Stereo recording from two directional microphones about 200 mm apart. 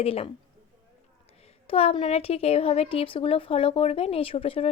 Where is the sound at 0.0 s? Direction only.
30° left (ahead or behind).